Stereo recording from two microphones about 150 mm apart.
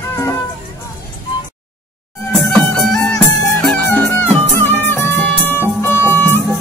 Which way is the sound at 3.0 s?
5° left (ahead or behind).